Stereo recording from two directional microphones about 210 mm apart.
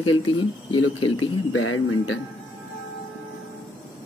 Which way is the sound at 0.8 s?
75° left (ahead or behind).